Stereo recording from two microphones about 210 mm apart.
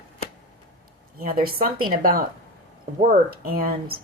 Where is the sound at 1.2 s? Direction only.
45° right (ahead or behind).